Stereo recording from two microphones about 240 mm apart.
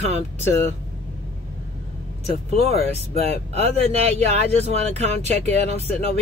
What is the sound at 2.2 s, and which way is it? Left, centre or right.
Speech, right.